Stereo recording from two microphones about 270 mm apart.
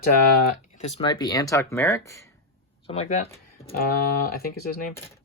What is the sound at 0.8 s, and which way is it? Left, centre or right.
Speech, left.